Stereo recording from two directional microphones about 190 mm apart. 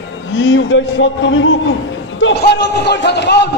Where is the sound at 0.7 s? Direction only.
85° left.